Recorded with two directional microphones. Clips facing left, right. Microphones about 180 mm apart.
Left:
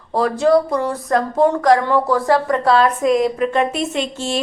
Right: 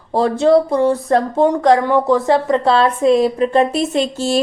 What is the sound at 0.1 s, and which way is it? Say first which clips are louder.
A woman's voice: right 2 dB; 30° right (ahead or behind).